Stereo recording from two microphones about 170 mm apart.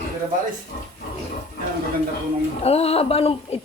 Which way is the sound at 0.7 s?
60° left (ahead or behind).